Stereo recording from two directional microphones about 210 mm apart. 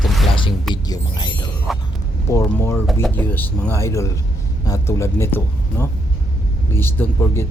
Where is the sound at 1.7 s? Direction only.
Centre (ahead or behind).